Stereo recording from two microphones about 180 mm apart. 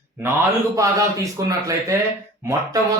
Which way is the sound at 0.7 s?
20° right (ahead or behind).